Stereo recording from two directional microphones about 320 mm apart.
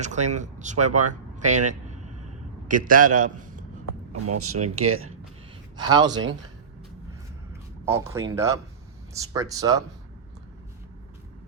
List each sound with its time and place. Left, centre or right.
0.0 s speech: right
1.4 s vehicle: right
2.6 s a man's voice: right
4.3 s speech: right
5.7 s speech: centre
7.9 s speech: centre